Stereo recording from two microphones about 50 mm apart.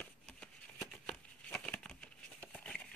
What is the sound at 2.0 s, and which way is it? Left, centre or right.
Patter, left.